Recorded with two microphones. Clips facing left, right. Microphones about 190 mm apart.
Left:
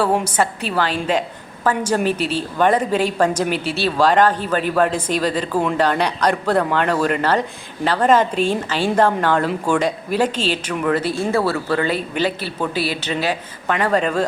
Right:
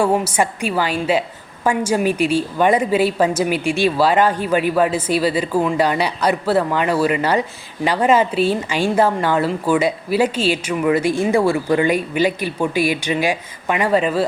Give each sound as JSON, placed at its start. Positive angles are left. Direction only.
{"t": 0.0, "sound": "a woman's voice", "side_deg": -10}